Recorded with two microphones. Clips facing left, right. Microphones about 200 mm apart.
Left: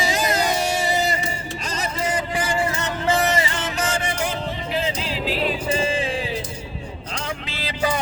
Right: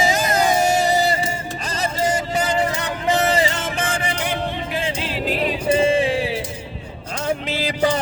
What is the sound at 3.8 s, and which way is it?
Music, 55° right (ahead or behind).